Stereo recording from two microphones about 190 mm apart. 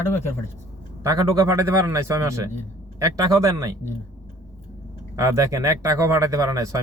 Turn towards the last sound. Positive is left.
turn(degrees=-20)  # may be behind; listen again after turning